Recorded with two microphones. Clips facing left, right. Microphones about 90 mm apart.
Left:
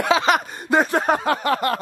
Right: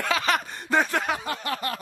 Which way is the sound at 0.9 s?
40° left (ahead or behind).